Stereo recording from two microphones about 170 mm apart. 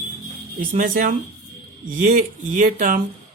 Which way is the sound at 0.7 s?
50° right (ahead or behind).